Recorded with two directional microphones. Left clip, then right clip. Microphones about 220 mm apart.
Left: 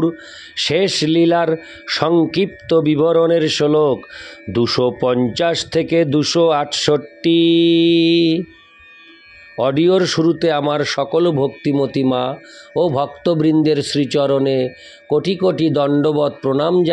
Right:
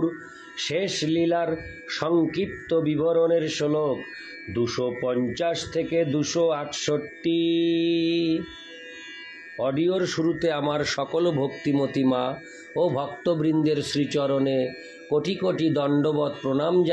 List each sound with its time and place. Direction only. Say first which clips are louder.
0.6 s speech: left 10 dB; 50° left (ahead or behind)
9.6 s a man's voice: left 10 dB; 45° left (ahead or behind)